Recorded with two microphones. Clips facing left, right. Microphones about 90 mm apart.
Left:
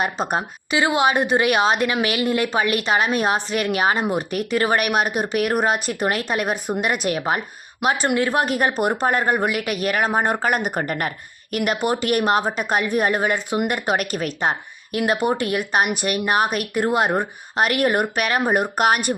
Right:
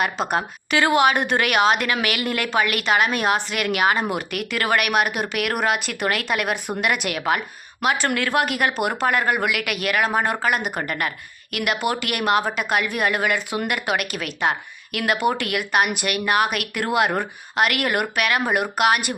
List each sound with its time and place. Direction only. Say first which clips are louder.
0.3 s a woman's voice: right 1 dB; 20° left (ahead or behind); by 19.1 s 35° left (ahead or behind)